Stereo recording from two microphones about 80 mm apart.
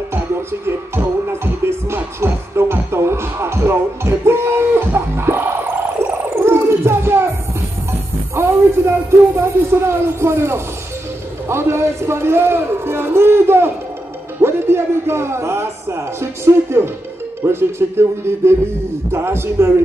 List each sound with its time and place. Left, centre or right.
0.1 s music: right
6.3 s gargling: right
8.4 s a sound: right
11.4 s a man's voice: right